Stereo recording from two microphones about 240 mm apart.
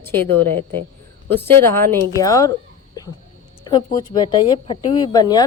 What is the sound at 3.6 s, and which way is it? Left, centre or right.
Speech, centre.